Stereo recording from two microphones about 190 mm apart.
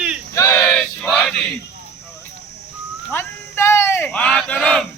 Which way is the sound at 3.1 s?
15° left (ahead or behind).